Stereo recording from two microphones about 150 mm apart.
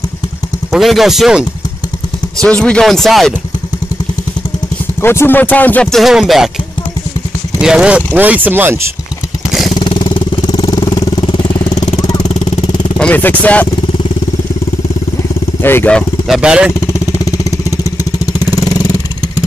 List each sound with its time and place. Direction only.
0.7 s speech: centre (ahead or behind)
2.4 s speech: 5° left (ahead or behind)
5.0 s speech: 15° left (ahead or behind); by 6.5 s centre (ahead or behind)
7.6 s speech: 5° right (ahead or behind)
9.8 s vehicle: 35° left (ahead or behind)
11.7 s vehicle: 50° left (ahead or behind)
12.0 s vehicle: 25° left (ahead or behind)
12.3 s vehicle: 50° left (ahead or behind)
12.6 s vehicle: 30° left (ahead or behind)
13.0 s speech: 10° left (ahead or behind)
15.6 s speech: 15° left (ahead or behind)
16.3 s speech: 5° right (ahead or behind)
16.8 s vehicle: 20° left (ahead or behind)